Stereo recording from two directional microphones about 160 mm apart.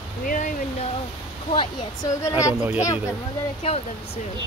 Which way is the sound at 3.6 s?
40° left (ahead or behind).